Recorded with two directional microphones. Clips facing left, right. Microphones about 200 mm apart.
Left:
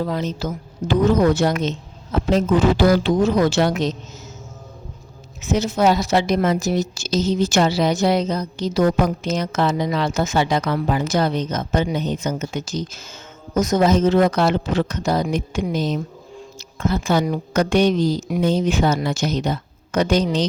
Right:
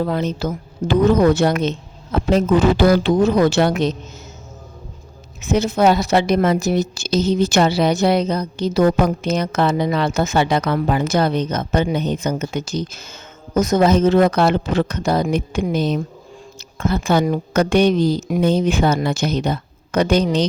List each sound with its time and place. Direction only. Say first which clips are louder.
0.0 s a woman's voice: right 3 dB; 60° right (ahead or behind)
5.4 s a woman's voice: right 2 dB; 60° right (ahead or behind)